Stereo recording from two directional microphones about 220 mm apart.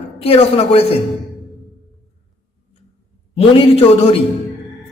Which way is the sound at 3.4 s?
25° left (ahead or behind).